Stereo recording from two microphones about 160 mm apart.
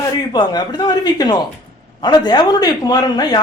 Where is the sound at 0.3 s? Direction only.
25° left (ahead or behind).